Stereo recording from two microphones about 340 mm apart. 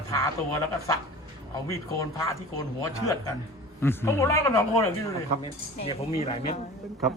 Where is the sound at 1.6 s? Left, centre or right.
Centre.